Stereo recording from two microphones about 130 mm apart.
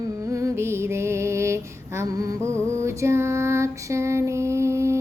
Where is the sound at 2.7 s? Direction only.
20° right (ahead or behind).